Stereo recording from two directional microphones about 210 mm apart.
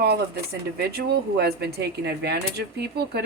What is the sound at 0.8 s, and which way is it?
Speech, 50° right (ahead or behind).